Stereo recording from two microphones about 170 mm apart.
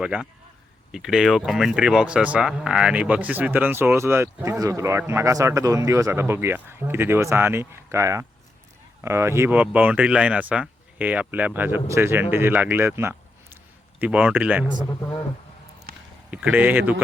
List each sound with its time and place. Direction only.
0.0 s a man's voice: 5° right (ahead or behind)
16.3 s speech: 10° right (ahead or behind)